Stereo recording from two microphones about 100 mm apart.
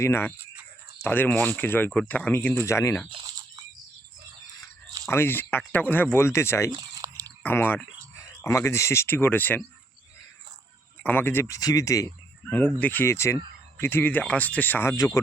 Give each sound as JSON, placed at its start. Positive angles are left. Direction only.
{"t": 0.0, "sound": "speech", "side_deg": 25}
{"t": 0.3, "sound": "a sound", "side_deg": -20}
{"t": 1.0, "sound": "speech", "side_deg": 20}
{"t": 2.6, "sound": "speech", "side_deg": 30}
{"t": 5.0, "sound": "speech", "side_deg": 20}
{"t": 6.9, "sound": "a sound", "side_deg": -35}
{"t": 7.4, "sound": "speech", "side_deg": 20}
{"t": 11.0, "sound": "speech", "side_deg": 20}
{"t": 11.4, "sound": "speech", "side_deg": 35}
{"t": 12.5, "sound": "speech", "side_deg": 15}
{"t": 14.9, "sound": "speech", "side_deg": 35}